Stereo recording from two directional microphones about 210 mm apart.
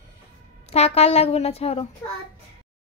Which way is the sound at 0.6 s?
30° left (ahead or behind).